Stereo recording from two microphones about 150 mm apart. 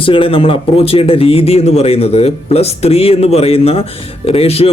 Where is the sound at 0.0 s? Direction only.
35° left (ahead or behind).